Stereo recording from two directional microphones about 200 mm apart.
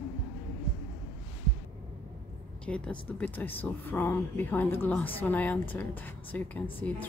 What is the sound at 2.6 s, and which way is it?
Speech, 5° left (ahead or behind).